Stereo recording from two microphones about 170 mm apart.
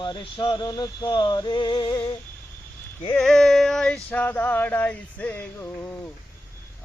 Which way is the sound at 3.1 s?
5° left (ahead or behind).